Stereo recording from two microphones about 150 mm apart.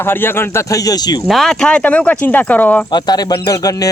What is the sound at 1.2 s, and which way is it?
Speech, centre (ahead or behind).